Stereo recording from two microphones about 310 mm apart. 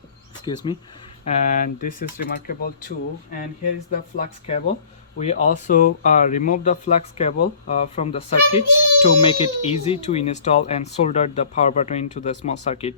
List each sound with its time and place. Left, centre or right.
0.4 s a child's voice: centre
3.9 s a child's voice: left